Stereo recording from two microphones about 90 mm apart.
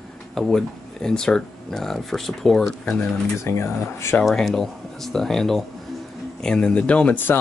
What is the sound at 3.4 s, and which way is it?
Speech, 30° left (ahead or behind).